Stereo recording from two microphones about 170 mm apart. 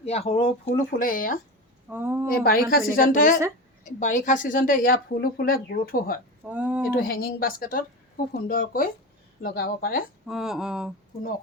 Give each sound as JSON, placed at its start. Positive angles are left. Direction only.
{"t": 0.0, "sound": "speech", "side_deg": 40}
{"t": 0.9, "sound": "speech", "side_deg": 55}
{"t": 1.9, "sound": "speech", "side_deg": -10}
{"t": 2.3, "sound": "speech", "side_deg": 65}
{"t": 6.4, "sound": "speech", "side_deg": -10}
{"t": 6.9, "sound": "speech", "side_deg": 60}
{"t": 10.2, "sound": "speech", "side_deg": 0}